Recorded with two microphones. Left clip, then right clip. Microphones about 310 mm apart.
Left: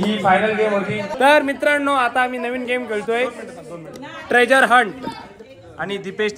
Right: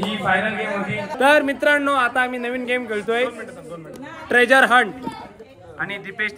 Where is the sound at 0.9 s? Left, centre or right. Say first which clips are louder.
Even; centre.